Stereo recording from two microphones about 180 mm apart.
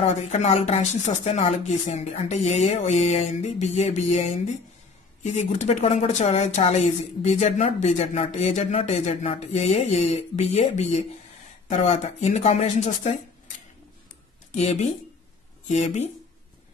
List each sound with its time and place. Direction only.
0.0 s a woman's voice: 40° left (ahead or behind)
14.5 s a woman's voice: 40° left (ahead or behind)